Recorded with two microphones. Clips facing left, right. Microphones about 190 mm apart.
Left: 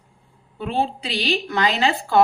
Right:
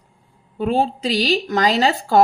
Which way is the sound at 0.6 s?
40° right (ahead or behind).